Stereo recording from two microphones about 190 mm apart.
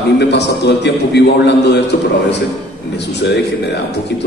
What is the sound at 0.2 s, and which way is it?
A man's voice, 60° left (ahead or behind).